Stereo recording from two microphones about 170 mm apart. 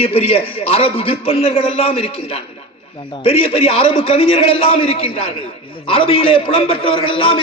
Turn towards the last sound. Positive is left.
turn(degrees=30)  # may be behind; listen again after turning